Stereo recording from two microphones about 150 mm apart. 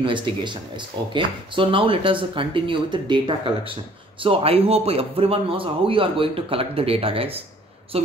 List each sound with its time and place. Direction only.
0.0 s speech: 35° right (ahead or behind)